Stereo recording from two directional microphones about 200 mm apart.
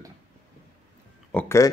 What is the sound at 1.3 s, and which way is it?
Speech, 10° left (ahead or behind).